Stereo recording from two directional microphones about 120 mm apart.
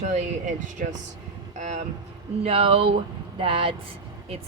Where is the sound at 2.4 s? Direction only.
55° right (ahead or behind).